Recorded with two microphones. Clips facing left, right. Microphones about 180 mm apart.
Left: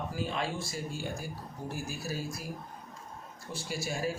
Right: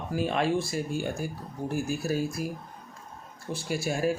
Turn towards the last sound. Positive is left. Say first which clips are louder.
# right 6 dB
turn(degrees=-55)  # may be behind; listen again after turning